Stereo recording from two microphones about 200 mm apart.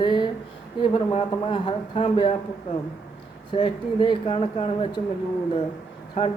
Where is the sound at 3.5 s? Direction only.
25° left (ahead or behind).